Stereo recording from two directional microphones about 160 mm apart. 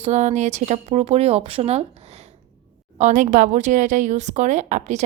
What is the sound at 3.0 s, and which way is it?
A woman's voice, 50° right (ahead or behind).